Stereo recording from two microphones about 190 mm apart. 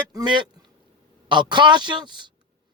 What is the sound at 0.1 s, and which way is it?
Speech, 20° right (ahead or behind).